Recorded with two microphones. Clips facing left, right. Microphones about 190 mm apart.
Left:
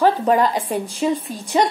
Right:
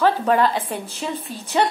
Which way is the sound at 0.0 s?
15° left (ahead or behind).